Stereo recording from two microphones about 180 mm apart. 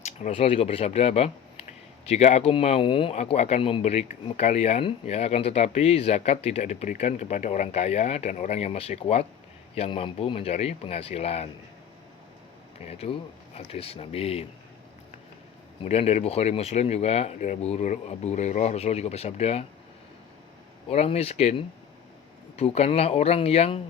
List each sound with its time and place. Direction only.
0.0 s speech: 35° left (ahead or behind)
12.8 s speech: 35° left (ahead or behind)
15.8 s speech: 35° left (ahead or behind)
20.9 s speech: 35° left (ahead or behind)
22.5 s speech: 35° left (ahead or behind)